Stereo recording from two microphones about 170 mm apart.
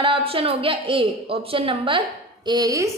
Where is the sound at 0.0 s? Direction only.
35° right (ahead or behind).